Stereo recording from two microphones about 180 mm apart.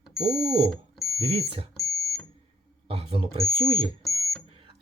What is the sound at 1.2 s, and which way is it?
Speech, 35° right (ahead or behind).